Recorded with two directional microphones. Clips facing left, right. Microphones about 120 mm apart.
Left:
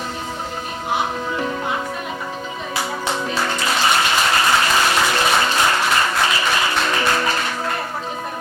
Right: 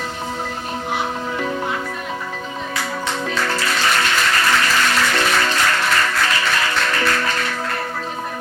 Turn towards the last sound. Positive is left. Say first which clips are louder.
# left 1 dB
turn(degrees=20)  # may be behind; listen again after turning